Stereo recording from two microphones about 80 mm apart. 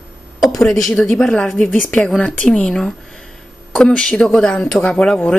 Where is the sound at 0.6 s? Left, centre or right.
Centre.